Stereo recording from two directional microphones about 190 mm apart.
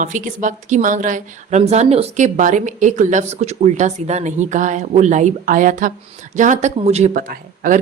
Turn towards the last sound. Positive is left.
turn(degrees=-45)  # may be behind; listen again after turning